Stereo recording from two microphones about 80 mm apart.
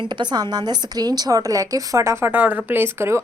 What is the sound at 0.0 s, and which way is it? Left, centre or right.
A woman's voice, right.